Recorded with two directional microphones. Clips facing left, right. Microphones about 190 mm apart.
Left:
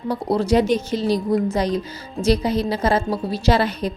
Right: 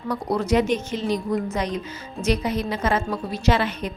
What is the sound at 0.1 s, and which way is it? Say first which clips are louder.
A woman's voice: left 3 dB; 30° left (ahead or behind).